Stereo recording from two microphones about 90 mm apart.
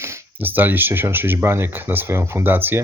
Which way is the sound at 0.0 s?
25° right (ahead or behind).